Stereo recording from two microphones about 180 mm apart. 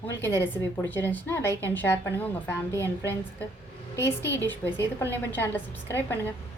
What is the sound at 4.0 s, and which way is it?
A woman's voice, 15° left (ahead or behind).